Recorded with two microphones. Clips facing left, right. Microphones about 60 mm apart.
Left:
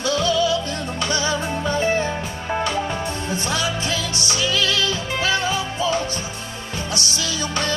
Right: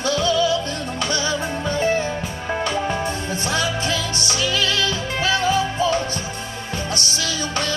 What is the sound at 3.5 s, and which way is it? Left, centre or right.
Music, right.